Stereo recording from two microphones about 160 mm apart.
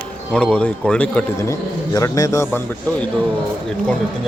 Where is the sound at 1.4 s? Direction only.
20° left (ahead or behind).